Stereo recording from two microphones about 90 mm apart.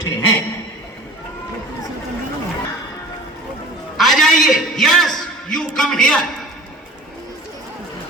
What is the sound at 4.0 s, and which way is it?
A man's voice, centre (ahead or behind).